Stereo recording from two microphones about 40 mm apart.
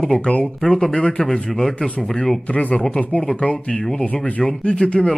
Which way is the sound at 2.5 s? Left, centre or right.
Left.